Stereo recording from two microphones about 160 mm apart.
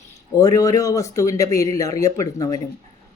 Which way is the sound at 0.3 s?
20° left (ahead or behind).